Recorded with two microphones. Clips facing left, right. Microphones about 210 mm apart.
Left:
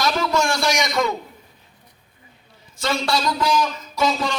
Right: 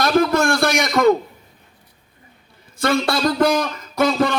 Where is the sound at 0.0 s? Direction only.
55° right (ahead or behind).